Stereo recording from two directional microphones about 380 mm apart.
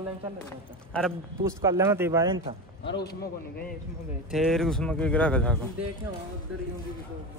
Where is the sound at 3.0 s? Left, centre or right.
Left.